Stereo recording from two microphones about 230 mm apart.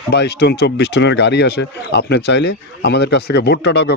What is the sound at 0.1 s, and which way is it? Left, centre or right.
Speech, left.